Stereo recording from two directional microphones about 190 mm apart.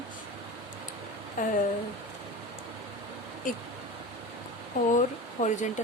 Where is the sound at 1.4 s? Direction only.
45° left (ahead or behind).